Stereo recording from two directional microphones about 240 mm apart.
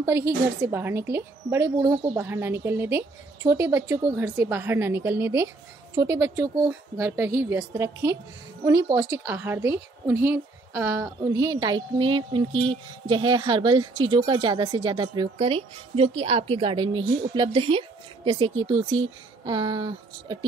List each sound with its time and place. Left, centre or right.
0.0 s a woman's voice: centre